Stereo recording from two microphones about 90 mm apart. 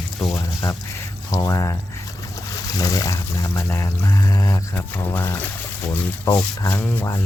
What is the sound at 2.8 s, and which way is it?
Speech, 40° left (ahead or behind).